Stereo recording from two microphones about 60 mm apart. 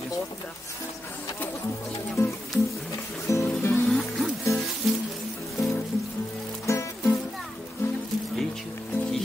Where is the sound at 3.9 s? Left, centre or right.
Centre.